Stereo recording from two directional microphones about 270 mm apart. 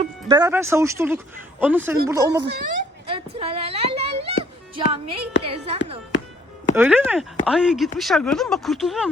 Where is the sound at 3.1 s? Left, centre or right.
Right.